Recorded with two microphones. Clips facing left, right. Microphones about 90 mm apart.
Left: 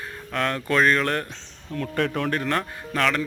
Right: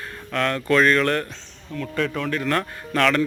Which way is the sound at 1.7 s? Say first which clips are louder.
Even; 45° left (ahead or behind).